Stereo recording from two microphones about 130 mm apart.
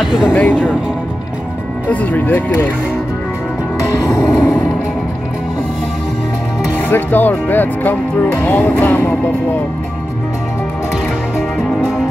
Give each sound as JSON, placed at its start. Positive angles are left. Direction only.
{"t": 0.0, "sound": "speech", "side_deg": -5}
{"t": 0.3, "sound": "speech", "side_deg": 15}
{"t": 1.9, "sound": "speech", "side_deg": 15}
{"t": 3.9, "sound": "music", "side_deg": 25}
{"t": 6.9, "sound": "speech", "side_deg": 15}